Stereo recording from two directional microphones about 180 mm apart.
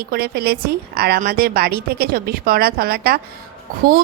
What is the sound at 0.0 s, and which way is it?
A woman's voice, 60° right (ahead or behind).